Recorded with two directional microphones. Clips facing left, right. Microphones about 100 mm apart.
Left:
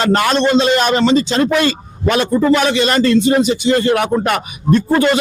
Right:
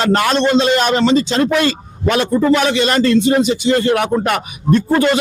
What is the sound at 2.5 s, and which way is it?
A man's voice, 10° left (ahead or behind).